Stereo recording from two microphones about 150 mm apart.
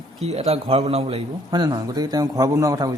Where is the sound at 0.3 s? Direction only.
45° right (ahead or behind).